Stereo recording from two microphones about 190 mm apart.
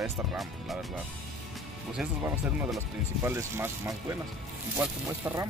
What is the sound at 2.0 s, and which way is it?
Speech, 5° right (ahead or behind).